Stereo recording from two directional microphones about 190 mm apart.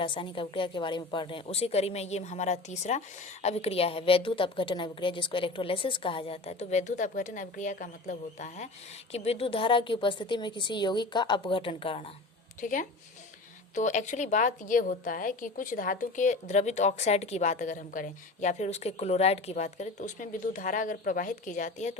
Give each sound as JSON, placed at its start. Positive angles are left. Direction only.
{"t": 0.0, "sound": "a woman's voice", "side_deg": 25}
{"t": 12.5, "sound": "a woman's voice", "side_deg": 45}